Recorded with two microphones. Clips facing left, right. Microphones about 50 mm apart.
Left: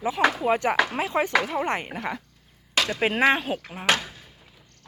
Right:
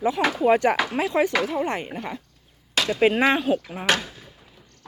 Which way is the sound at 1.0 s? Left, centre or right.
Left.